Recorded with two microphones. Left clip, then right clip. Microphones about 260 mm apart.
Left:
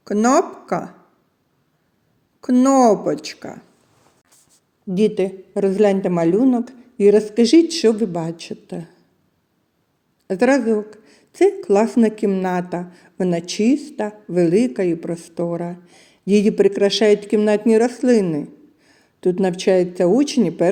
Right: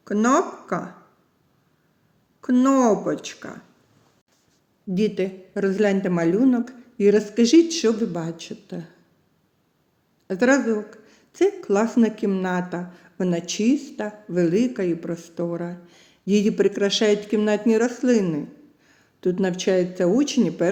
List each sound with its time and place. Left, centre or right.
0.0 s speech: left
2.4 s speech: left
4.9 s speech: centre
10.2 s speech: left